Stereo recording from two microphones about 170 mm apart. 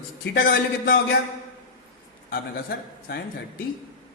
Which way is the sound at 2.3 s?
60° left (ahead or behind).